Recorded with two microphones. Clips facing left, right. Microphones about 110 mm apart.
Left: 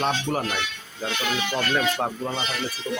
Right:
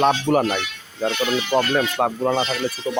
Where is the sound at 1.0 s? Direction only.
45° right (ahead or behind).